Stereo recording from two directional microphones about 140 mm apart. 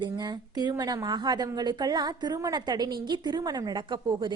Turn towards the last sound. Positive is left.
turn(degrees=-35)  # may be behind; listen again after turning